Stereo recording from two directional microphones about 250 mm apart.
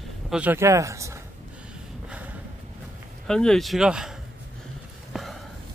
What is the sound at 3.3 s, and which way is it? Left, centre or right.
Speech, centre.